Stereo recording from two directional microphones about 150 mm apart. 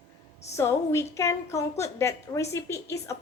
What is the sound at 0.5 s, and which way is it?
A woman's voice, 20° left (ahead or behind).